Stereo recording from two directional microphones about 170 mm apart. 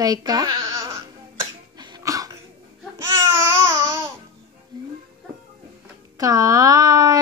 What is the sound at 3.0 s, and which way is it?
Babbling, 15° right (ahead or behind).